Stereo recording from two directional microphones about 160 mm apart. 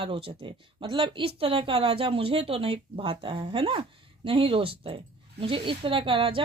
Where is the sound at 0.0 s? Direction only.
35° right (ahead or behind).